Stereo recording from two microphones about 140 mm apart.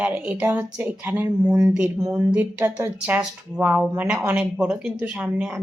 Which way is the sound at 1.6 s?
5° right (ahead or behind).